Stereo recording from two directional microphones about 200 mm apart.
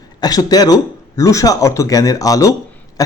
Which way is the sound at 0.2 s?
20° left (ahead or behind).